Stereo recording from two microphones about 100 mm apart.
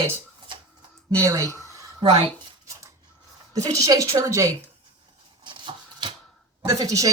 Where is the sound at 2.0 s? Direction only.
90° right.